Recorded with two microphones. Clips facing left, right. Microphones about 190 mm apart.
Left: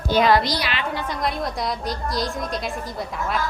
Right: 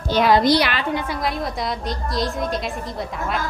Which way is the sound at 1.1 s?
Centre (ahead or behind).